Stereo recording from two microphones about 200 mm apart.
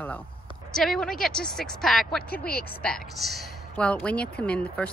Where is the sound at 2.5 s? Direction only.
50° left (ahead or behind).